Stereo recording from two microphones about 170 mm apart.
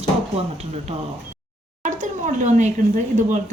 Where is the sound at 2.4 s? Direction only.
45° right (ahead or behind).